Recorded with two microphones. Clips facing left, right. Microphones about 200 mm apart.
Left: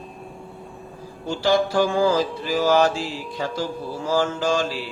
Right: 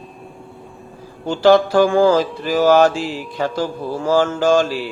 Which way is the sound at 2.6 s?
55° right (ahead or behind).